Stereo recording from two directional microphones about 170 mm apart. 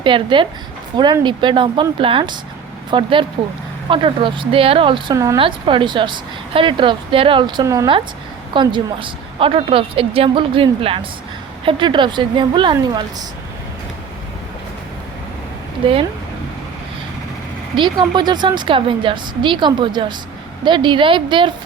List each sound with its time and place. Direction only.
0.0 s speech: 30° right (ahead or behind)
5.1 s speech: 20° right (ahead or behind)
5.4 s a woman's voice: 30° right (ahead or behind)
17.7 s speech: 25° right (ahead or behind)